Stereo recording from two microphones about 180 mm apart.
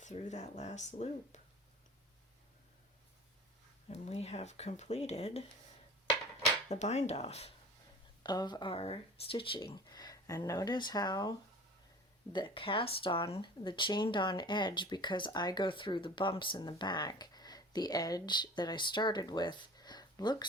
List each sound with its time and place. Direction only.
0.0 s speech: 40° left (ahead or behind)
3.8 s speech: 35° left (ahead or behind)
6.7 s speech: 40° left (ahead or behind)
8.2 s speech: 25° left (ahead or behind)